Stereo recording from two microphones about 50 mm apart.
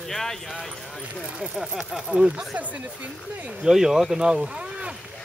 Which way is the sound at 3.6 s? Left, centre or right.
Centre.